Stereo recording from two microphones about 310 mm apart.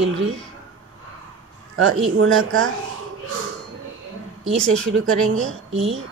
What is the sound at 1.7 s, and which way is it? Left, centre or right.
Speech, right.